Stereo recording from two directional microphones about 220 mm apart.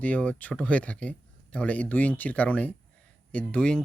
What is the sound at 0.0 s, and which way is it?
Speech, 5° left (ahead or behind).